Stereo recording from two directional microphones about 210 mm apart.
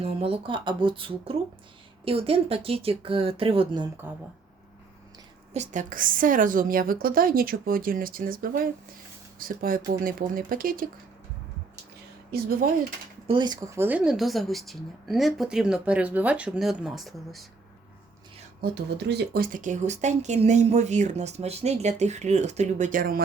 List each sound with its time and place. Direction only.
0.0 s speech: 25° right (ahead or behind)
4.0 s speech: 10° right (ahead or behind)
5.5 s a woman's voice: 40° right (ahead or behind)
12.3 s a woman's voice: 45° right (ahead or behind)
13.2 s speech: 20° right (ahead or behind); by 17.4 s centre (ahead or behind)
18.6 s speech: 50° right (ahead or behind)